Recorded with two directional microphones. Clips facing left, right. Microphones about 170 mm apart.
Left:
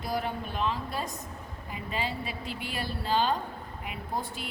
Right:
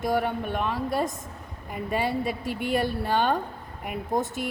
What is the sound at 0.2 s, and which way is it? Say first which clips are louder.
A woman's voice: right 5 dB; 60° right (ahead or behind).